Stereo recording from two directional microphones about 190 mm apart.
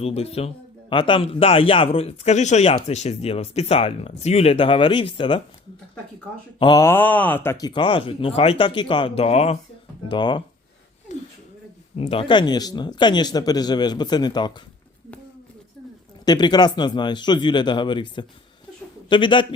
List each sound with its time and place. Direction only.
0.0 s a man's voice: 30° left (ahead or behind)
6.6 s speech: 20° left (ahead or behind)
11.1 s a sound: 40° left (ahead or behind)
11.9 s speech: 30° left (ahead or behind)
16.2 s speech: 20° left (ahead or behind)